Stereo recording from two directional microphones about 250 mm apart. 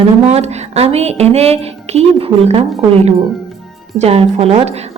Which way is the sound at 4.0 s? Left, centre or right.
Right.